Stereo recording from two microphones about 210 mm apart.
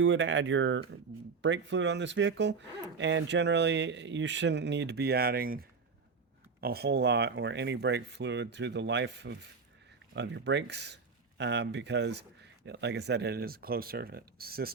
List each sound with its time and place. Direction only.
0.0 s speech: 65° right (ahead or behind); by 14.7 s 45° right (ahead or behind)